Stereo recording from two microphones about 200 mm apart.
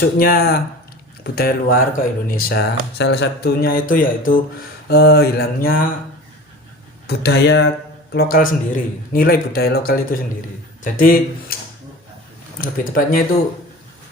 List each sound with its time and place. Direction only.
0.2 s speech: 50° left (ahead or behind)
7.1 s speech: 55° left (ahead or behind)
12.5 s speech: 45° left (ahead or behind)